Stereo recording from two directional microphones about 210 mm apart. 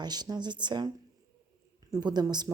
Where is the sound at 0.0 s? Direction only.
20° right (ahead or behind).